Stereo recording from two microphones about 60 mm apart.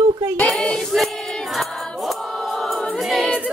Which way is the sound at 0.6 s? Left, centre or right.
Centre.